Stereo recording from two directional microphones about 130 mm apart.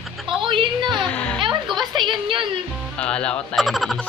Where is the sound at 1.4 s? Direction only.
35° right (ahead or behind).